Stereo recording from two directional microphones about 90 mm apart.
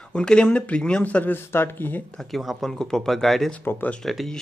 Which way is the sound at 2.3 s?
Centre (ahead or behind).